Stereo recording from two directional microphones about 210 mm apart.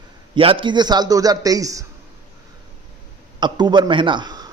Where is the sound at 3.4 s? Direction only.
20° right (ahead or behind).